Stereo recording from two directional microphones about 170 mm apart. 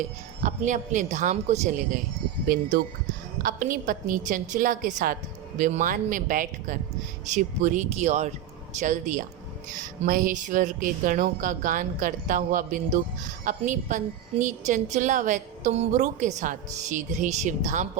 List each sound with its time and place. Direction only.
0.4 s a woman's voice: 45° right (ahead or behind)
2.5 s a woman's voice: 60° right (ahead or behind)